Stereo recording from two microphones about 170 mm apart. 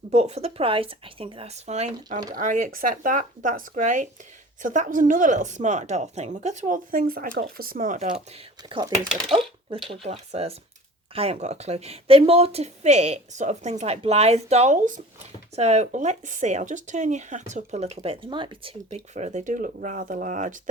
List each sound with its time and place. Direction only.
0.1 s speech: 40° right (ahead or behind)
8.3 s speech: 35° right (ahead or behind)
15.5 s speech: 40° right (ahead or behind)